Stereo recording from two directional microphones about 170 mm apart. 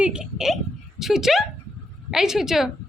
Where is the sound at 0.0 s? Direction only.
5° right (ahead or behind).